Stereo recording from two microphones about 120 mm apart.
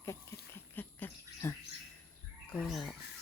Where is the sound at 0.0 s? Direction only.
25° left (ahead or behind).